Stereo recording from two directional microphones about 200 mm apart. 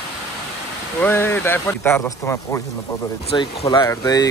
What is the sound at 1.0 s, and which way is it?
Speech, 10° left (ahead or behind).